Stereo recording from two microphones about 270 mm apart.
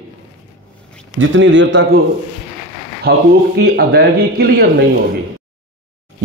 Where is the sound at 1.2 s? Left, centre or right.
Right.